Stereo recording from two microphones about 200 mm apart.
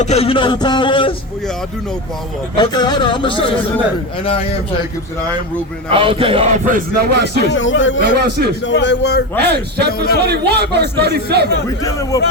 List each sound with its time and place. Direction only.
0.0 s speech: 30° left (ahead or behind)
2.6 s speech: 20° left (ahead or behind)
5.9 s speech: 25° right (ahead or behind); by 7.4 s 55° right (ahead or behind)
7.5 s speech: 70° left (ahead or behind)
8.0 s a man's voice: 55° right (ahead or behind)
8.6 s speech: 60° left (ahead or behind)
9.4 s a man's voice: 55° right (ahead or behind)
11.8 s a man's voice: 15° left (ahead or behind)